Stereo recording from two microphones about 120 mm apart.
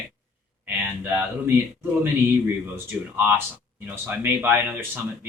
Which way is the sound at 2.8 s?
20° right (ahead or behind).